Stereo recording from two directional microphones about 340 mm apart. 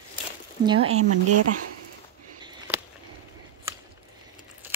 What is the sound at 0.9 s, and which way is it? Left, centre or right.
Speech, right.